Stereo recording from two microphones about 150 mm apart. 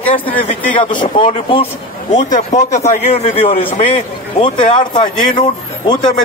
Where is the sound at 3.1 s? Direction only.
40° left (ahead or behind).